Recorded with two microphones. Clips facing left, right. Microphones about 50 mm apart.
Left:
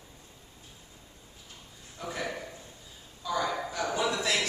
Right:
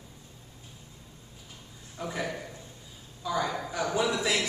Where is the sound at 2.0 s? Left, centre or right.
Centre.